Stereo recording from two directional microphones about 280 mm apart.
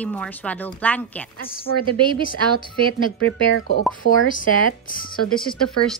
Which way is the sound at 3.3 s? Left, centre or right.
Right.